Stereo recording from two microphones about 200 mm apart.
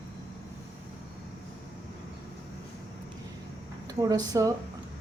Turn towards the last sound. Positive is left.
turn(degrees=-20)  # may be behind; listen again after turning